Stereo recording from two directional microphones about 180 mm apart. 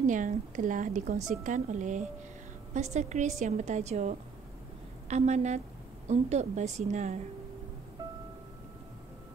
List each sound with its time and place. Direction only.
0.0 s a woman's voice: 45° right (ahead or behind)
8.0 s music: 25° right (ahead or behind)